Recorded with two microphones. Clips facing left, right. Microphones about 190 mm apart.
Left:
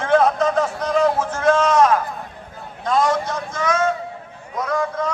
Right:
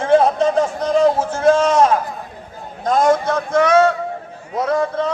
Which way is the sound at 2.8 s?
50° right (ahead or behind).